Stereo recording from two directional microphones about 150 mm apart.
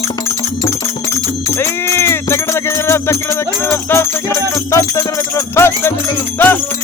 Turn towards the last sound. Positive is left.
turn(degrees=15)  # may be behind; listen again after turning